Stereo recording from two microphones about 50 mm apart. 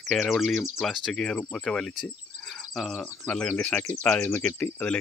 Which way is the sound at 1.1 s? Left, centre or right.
Centre.